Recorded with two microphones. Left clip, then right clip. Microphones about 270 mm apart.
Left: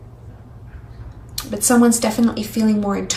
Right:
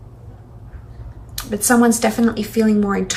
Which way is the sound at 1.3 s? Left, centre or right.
Centre.